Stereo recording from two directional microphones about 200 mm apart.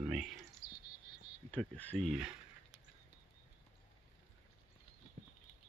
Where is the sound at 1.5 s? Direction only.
5° left (ahead or behind).